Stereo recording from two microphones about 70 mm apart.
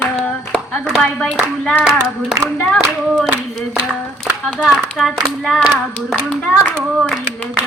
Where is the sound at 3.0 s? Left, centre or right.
Centre.